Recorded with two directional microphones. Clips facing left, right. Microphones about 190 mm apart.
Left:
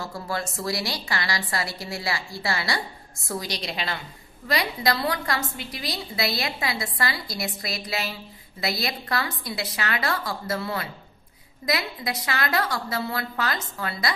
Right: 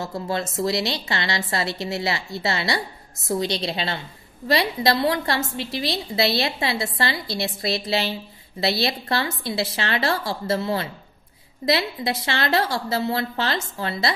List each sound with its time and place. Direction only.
0.0 s a woman's voice: 20° right (ahead or behind)